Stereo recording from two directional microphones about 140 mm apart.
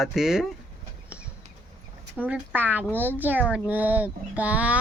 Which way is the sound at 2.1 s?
10° right (ahead or behind).